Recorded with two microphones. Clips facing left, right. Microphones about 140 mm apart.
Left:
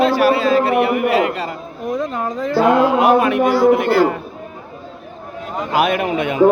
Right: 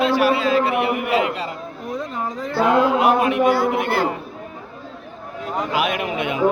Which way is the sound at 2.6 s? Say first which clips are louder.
Left 3 dB; 50° left (ahead or behind).